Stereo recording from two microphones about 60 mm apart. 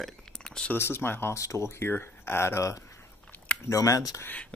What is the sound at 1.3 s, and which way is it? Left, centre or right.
Speech, left.